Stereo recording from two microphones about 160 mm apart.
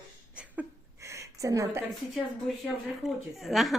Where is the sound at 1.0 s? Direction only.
20° right (ahead or behind).